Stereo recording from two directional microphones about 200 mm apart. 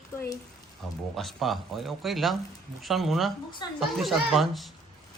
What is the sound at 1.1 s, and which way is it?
Speech, centre (ahead or behind).